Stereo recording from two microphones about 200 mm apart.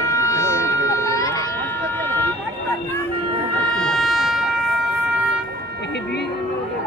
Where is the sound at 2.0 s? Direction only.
10° left (ahead or behind).